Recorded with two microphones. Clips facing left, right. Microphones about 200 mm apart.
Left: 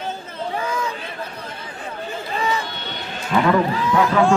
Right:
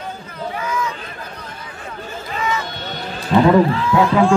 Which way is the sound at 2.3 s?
30° left (ahead or behind).